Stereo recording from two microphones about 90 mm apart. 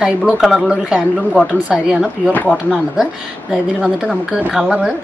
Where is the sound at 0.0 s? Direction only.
10° right (ahead or behind).